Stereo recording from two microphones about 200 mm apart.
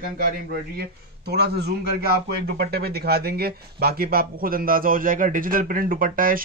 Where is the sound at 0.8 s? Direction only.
55° right (ahead or behind).